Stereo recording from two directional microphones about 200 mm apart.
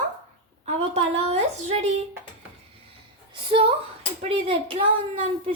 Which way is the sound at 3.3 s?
25° right (ahead or behind).